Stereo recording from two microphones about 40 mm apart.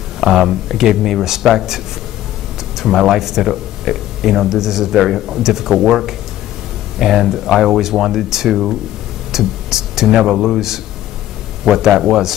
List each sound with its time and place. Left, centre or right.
0.2 s speech: centre
2.8 s speech: centre